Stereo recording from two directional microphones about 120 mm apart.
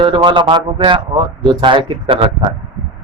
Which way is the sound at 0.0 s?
40° right (ahead or behind).